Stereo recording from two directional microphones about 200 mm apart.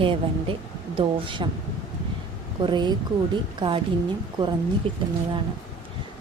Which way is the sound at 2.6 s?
20° right (ahead or behind).